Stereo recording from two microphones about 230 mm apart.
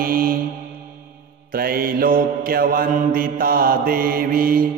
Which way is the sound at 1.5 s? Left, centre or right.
Right.